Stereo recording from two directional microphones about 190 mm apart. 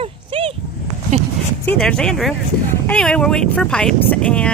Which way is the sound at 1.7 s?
5° left (ahead or behind).